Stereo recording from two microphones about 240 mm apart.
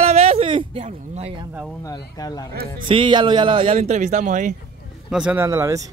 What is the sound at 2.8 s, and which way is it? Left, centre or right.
A man's voice, right.